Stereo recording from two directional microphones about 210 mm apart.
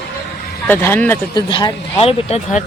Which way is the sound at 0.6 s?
10° left (ahead or behind).